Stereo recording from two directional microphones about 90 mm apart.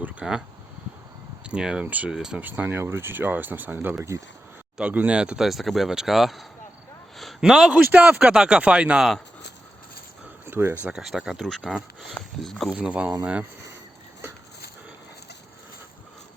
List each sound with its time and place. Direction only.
0.0 s speech: 10° right (ahead or behind)
1.5 s speech: 10° right (ahead or behind)
2.4 s speech: 20° right (ahead or behind); by 6.4 s 5° right (ahead or behind)
7.2 s a sound: centre (ahead or behind)
7.9 s speech: 20° right (ahead or behind)
8.2 s speech: 10° right (ahead or behind)
10.4 s a sound: 25° right (ahead or behind)
11.0 s speech: 5° right (ahead or behind)
11.4 s speech: 5° left (ahead or behind)
12.7 s speech: 15° right (ahead or behind)